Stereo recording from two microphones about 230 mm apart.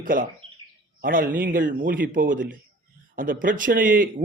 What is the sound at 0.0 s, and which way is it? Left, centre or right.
Speech, right.